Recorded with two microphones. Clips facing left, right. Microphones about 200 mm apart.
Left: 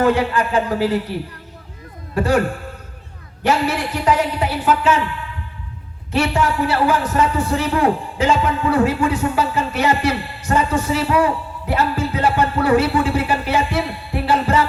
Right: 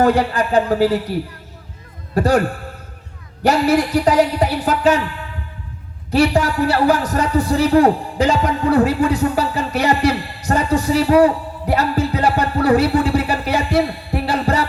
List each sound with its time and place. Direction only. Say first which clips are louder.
0.0 s a man's voice: right 1 dB; 40° right (ahead or behind)
2.1 s a man's voice: right 2 dB; 40° right (ahead or behind)
3.4 s a man's voice: right 4 dB; 40° right (ahead or behind)
6.1 s a man's voice: right 3 dB; 35° right (ahead or behind)